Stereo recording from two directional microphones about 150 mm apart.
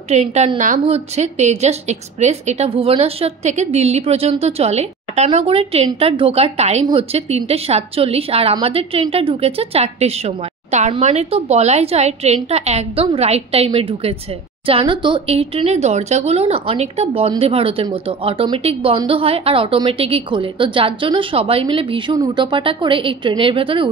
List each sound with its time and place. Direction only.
0.1 s a woman's voice: 50° right (ahead or behind)